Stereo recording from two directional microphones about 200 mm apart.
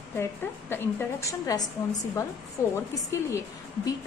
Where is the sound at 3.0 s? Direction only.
15° left (ahead or behind).